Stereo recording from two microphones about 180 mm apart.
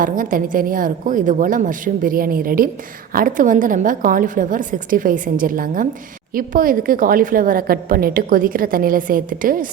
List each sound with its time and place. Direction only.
0.0 s a woman's voice: 50° right (ahead or behind)